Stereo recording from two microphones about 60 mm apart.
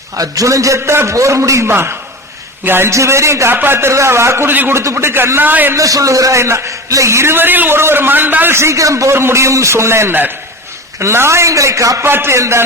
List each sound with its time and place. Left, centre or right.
0.2 s a man's voice: right
1.7 s a man's voice: right
2.9 s a man's voice: right
3.5 s a man's voice: right
5.7 s a man's voice: right
6.4 s a man's voice: right
7.3 s a man's voice: right
8.5 s speech: right
9.1 s a man's voice: right
10.1 s a man's voice: right
11.0 s speech: right
12.0 s a man's voice: right
12.3 s a man's voice: right